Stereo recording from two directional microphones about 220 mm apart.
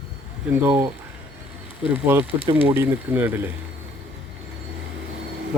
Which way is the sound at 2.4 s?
25° right (ahead or behind).